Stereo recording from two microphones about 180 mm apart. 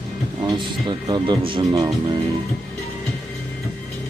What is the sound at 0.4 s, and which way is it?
Speech, 25° right (ahead or behind).